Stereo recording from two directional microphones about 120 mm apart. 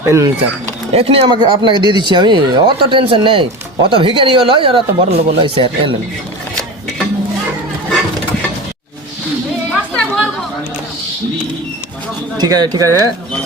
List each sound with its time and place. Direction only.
0.0 s speech: 25° right (ahead or behind)
0.9 s speech: 50° right (ahead or behind)
9.6 s chatter: 10° left (ahead or behind)
12.4 s speech: 35° right (ahead or behind)